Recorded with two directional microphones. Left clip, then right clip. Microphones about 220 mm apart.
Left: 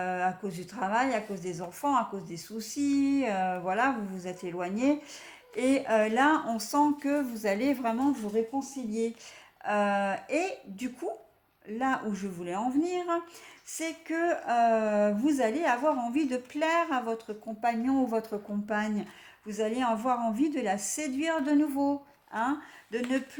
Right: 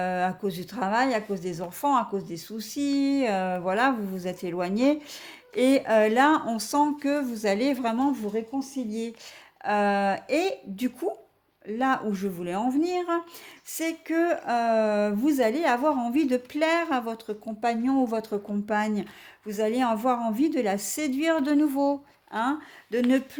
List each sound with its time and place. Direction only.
0.0 s speech: 45° right (ahead or behind)